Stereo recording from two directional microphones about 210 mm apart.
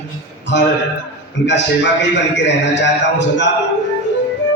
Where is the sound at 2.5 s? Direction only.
55° left (ahead or behind).